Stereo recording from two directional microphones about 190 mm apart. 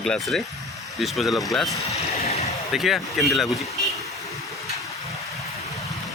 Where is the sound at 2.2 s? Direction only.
35° left (ahead or behind).